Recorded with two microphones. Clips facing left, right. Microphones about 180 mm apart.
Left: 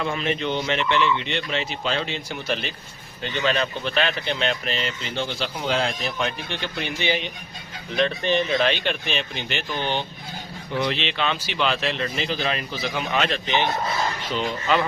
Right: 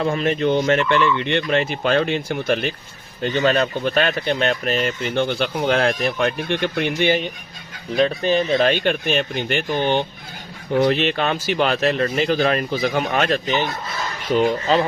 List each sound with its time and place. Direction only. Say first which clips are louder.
0.0 s speech: right 6 dB; 40° right (ahead or behind)
7.9 s speech: right 4 dB; 40° right (ahead or behind)